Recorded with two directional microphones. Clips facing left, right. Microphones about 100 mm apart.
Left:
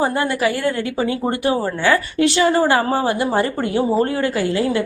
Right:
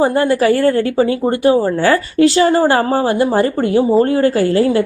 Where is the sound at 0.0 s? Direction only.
30° right (ahead or behind).